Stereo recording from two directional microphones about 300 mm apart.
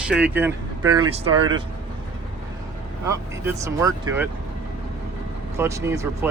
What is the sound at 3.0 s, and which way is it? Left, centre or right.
Speech, centre.